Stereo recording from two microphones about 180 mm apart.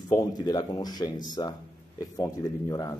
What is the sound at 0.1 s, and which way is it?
Speech, 20° left (ahead or behind).